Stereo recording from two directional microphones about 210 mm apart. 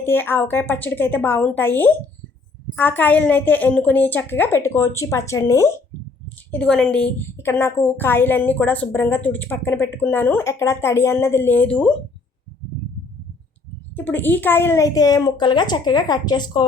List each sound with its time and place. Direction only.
0.0 s a woman's voice: 10° left (ahead or behind)
13.9 s a woman's voice: 10° left (ahead or behind)